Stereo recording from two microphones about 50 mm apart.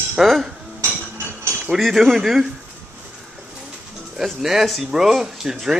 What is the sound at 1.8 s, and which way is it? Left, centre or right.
Speech, centre.